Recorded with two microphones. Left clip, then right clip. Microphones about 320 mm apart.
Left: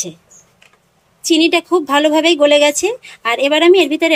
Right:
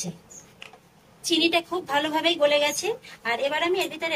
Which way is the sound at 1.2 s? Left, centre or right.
Centre.